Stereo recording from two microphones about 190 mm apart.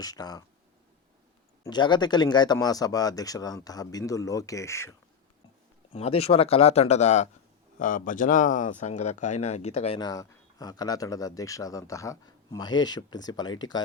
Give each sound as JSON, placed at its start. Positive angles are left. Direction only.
{"t": 0.0, "sound": "speech", "side_deg": 20}
{"t": 1.6, "sound": "speech", "side_deg": 25}
{"t": 5.9, "sound": "speech", "side_deg": 30}
{"t": 10.0, "sound": "speech", "side_deg": 20}